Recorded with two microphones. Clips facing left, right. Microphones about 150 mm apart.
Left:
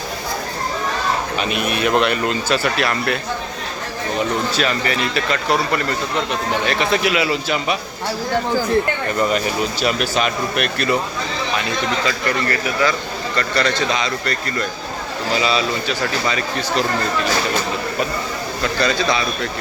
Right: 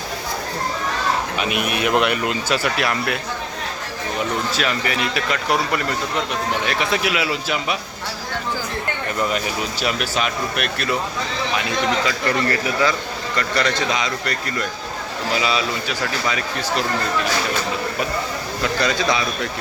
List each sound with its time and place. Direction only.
1.4 s speech: 10° right (ahead or behind)
4.5 s speech: 5° right (ahead or behind)
9.1 s speech: centre (ahead or behind)
12.2 s a man's voice: 25° right (ahead or behind); by 16.8 s 5° right (ahead or behind)
18.6 s speech: 15° right (ahead or behind)